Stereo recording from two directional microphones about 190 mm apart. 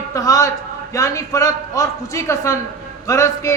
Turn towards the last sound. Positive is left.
turn(degrees=15)  # may be behind; listen again after turning